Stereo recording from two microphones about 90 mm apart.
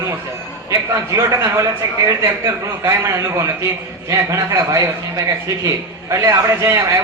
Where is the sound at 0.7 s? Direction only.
35° right (ahead or behind).